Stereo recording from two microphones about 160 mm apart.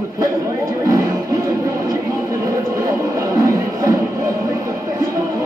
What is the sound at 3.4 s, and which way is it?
Music, 20° right (ahead or behind).